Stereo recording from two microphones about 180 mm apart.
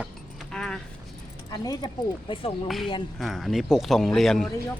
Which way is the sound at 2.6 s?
Centre (ahead or behind).